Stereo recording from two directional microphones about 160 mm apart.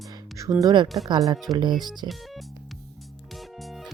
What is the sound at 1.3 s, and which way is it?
Speech, centre (ahead or behind).